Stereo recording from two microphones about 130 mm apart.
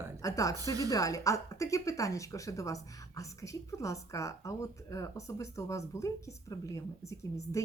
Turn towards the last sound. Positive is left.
turn(degrees=25)  # may be behind; listen again after turning